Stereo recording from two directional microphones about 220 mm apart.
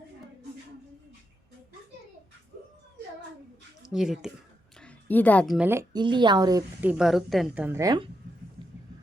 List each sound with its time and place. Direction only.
3.8 s a woman's voice: centre (ahead or behind)
4.8 s a sound: 5° left (ahead or behind)
5.5 s speech: 10° right (ahead or behind)
6.8 s a woman's voice: 5° right (ahead or behind)